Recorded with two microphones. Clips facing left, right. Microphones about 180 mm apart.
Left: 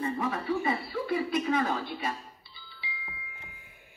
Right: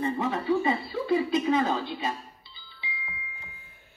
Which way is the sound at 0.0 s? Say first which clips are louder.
Right 3 dB; 25° right (ahead or behind).